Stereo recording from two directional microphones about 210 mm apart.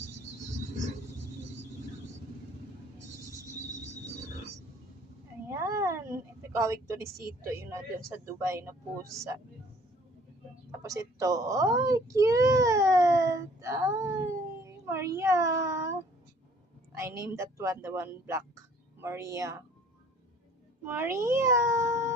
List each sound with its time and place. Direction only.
5.5 s a sound: 15° right (ahead or behind)
6.6 s a child's voice: 15° right (ahead or behind)
10.7 s a child's voice: 15° right (ahead or behind)
14.6 s a sound: 15° right (ahead or behind)
16.9 s a woman's voice: 15° right (ahead or behind)
20.8 s a child's voice: 10° right (ahead or behind)